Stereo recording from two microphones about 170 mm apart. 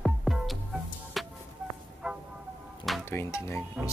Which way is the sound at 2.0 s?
5° right (ahead or behind).